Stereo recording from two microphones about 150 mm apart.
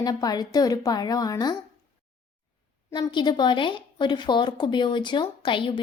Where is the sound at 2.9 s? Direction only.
30° left (ahead or behind).